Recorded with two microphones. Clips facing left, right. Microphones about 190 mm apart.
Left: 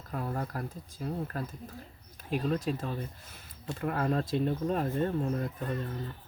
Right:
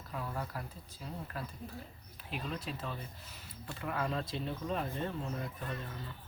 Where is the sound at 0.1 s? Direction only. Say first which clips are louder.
Left 5 dB; 45° left (ahead or behind).